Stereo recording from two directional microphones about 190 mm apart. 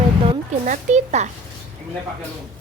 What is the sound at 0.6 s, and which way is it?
Speech, 40° right (ahead or behind).